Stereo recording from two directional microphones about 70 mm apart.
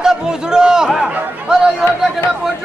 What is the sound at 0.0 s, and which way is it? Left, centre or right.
Chatter, centre.